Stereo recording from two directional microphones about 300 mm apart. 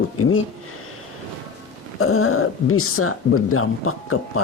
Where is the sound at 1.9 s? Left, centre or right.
Left.